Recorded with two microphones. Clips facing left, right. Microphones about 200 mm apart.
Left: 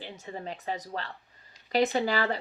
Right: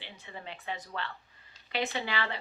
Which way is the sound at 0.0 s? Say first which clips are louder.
Left 7 dB; 40° left (ahead or behind).